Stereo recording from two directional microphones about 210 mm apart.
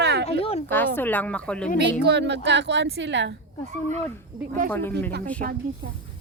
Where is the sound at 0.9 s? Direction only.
10° left (ahead or behind).